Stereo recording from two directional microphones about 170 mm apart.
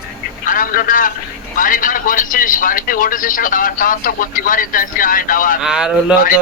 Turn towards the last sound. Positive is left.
turn(degrees=-5)  # may be behind; listen again after turning